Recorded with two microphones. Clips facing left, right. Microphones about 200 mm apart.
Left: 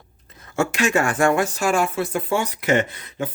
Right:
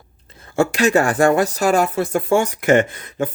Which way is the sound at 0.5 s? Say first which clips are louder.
Right 5 dB; 35° right (ahead or behind).